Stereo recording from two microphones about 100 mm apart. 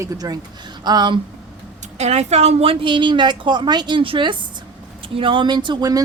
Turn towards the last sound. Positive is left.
turn(degrees=-50)  # may be behind; listen again after turning